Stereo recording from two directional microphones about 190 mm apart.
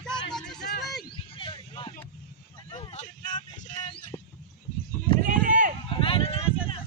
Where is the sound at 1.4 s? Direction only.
25° left (ahead or behind).